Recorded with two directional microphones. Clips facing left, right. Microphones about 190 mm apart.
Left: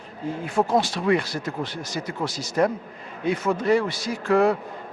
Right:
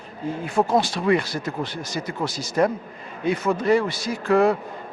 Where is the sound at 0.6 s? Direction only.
25° right (ahead or behind).